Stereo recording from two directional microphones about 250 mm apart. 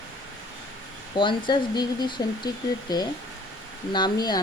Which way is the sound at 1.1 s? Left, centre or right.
Centre.